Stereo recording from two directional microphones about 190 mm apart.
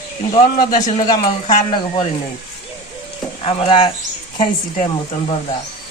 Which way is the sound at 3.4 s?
30° left (ahead or behind).